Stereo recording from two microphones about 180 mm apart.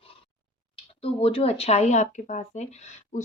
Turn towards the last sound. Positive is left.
turn(degrees=40)  # may be behind; listen again after turning